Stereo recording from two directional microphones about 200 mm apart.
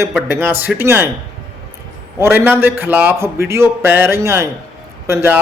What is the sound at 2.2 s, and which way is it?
Speech, 10° right (ahead or behind).